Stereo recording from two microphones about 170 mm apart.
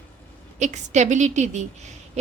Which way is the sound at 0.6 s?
45° right (ahead or behind).